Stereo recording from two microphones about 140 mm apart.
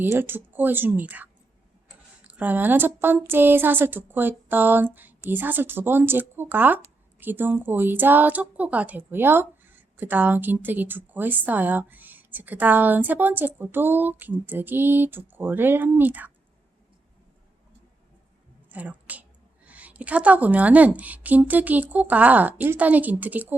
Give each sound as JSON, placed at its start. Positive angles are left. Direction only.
{"t": 0.0, "sound": "a woman's voice", "side_deg": -15}
{"t": 18.7, "sound": "a woman's voice", "side_deg": -10}